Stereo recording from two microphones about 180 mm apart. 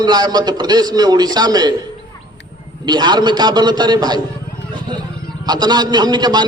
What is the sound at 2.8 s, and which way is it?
A man's voice, 25° right (ahead or behind).